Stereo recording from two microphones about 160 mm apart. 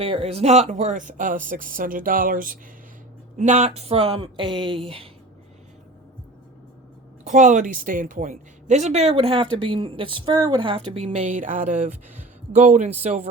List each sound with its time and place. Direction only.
0.0 s speech: 35° right (ahead or behind); by 2.6 s 60° right (ahead or behind)
3.3 s speech: 50° right (ahead or behind)
7.3 s speech: 55° right (ahead or behind)